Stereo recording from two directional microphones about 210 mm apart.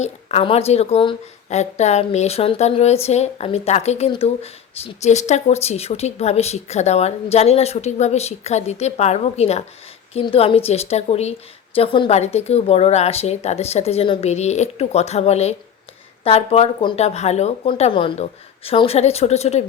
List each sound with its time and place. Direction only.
0.0 s a woman's voice: 30° left (ahead or behind)